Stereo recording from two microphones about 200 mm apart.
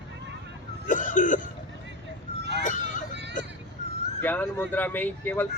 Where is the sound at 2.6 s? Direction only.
40° left (ahead or behind).